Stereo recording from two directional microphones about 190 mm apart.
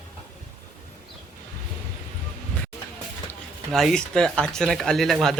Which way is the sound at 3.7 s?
Centre (ahead or behind).